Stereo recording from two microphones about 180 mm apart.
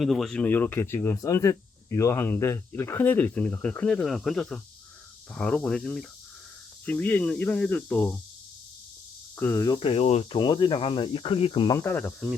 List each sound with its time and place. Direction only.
0.0 s speech: centre (ahead or behind)
9.3 s speech: 15° left (ahead or behind)
11.8 s speech: 10° left (ahead or behind)